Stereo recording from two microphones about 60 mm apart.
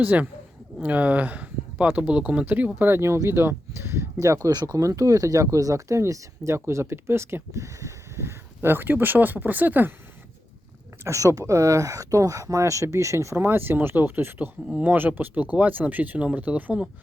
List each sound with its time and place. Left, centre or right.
0.0 s speech: right
7.5 s speech: right
11.0 s speech: right
13.3 s speech: right